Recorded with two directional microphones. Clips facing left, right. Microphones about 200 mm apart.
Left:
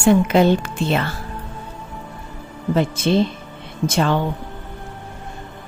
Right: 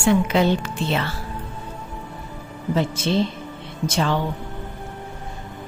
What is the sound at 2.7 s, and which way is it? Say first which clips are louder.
A woman's voice: left 4 dB; 55° left (ahead or behind).